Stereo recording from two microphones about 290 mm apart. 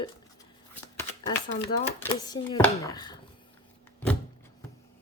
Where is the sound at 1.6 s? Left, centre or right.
Centre.